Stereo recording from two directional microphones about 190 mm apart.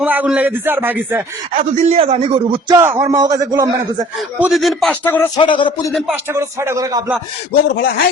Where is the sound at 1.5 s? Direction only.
40° right (ahead or behind).